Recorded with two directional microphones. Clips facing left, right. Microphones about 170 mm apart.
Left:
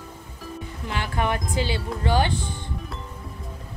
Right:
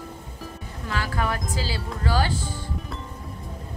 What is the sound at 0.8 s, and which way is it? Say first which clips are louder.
Speech: left 1 dB; 20° left (ahead or behind).